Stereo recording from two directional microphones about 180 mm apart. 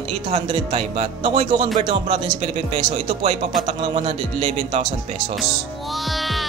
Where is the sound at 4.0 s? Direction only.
35° right (ahead or behind).